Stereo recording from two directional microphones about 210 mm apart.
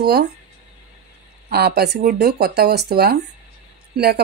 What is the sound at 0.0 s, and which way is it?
Speech, 50° right (ahead or behind).